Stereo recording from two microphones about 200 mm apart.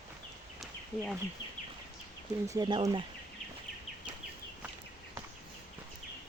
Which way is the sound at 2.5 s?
20° right (ahead or behind).